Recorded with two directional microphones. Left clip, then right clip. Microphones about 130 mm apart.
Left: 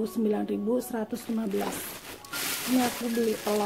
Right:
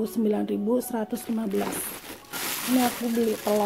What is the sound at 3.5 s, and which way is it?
Speech, 20° right (ahead or behind).